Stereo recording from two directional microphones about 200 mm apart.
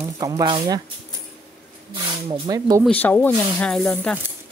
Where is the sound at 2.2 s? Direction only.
25° right (ahead or behind).